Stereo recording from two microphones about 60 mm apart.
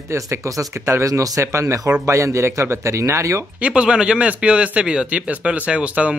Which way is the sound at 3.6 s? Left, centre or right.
Centre.